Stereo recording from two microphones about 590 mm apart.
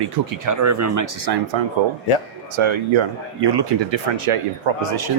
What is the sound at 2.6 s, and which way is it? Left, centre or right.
Speech, right.